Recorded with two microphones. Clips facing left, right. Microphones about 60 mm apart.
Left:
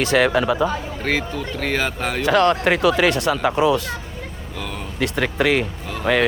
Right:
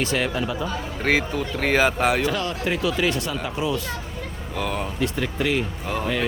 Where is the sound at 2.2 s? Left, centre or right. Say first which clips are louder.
Left 8 dB; left.